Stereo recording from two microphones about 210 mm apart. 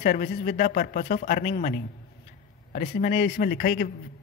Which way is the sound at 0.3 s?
50° left (ahead or behind).